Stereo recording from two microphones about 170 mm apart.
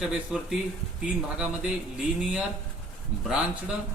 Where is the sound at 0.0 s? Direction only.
5° right (ahead or behind).